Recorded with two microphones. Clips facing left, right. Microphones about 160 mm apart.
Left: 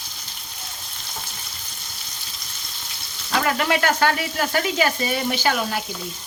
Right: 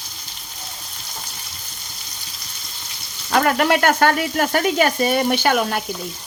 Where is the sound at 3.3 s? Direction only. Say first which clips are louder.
Right 5 dB; 55° right (ahead or behind).